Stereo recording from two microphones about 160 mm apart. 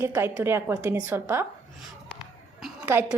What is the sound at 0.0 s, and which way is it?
A woman's voice, 15° right (ahead or behind).